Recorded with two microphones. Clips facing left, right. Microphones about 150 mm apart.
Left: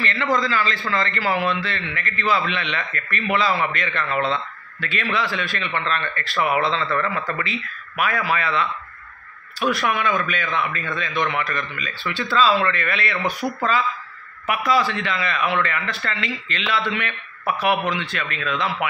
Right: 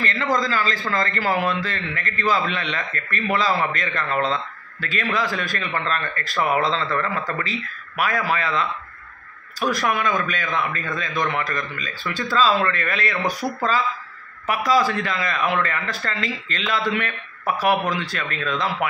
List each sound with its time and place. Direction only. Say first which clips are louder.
0.0 s a man's voice: even; 40° right (ahead or behind)
14.7 s speech: right 1 dB; 40° right (ahead or behind)